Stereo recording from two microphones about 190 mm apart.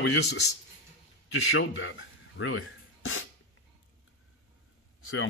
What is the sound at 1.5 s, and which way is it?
Speech, 85° left.